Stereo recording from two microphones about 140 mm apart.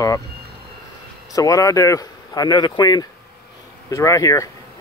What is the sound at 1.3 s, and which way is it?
Speech, 25° left (ahead or behind).